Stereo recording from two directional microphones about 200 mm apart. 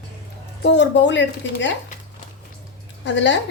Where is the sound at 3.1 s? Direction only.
65° left (ahead or behind).